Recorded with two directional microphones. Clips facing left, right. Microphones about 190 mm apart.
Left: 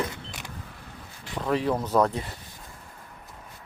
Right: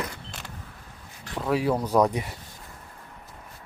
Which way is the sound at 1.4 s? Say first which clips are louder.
Right 1 dB; 5° right (ahead or behind).